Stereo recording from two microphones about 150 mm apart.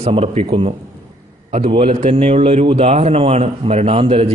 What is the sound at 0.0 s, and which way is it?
A man's voice, 40° right (ahead or behind).